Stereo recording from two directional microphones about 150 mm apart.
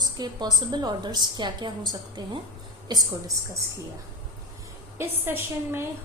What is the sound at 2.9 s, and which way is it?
Speech, 25° right (ahead or behind).